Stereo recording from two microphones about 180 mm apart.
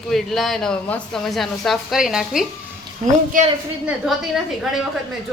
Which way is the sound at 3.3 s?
45° right (ahead or behind).